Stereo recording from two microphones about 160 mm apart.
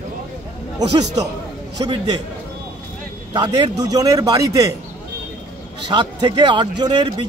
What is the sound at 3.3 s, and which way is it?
Speech, 25° right (ahead or behind).